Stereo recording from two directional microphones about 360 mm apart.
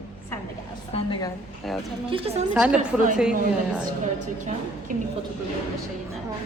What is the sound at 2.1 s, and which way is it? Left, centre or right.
Speech, centre.